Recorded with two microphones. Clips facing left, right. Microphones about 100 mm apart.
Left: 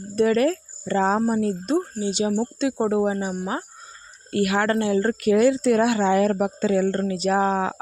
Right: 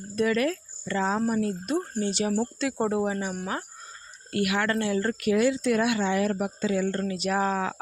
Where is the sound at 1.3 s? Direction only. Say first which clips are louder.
Left 4 dB; 30° left (ahead or behind).